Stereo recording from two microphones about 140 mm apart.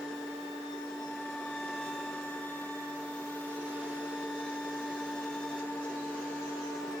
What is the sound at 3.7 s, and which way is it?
Vacuum cleaner, 5° right (ahead or behind).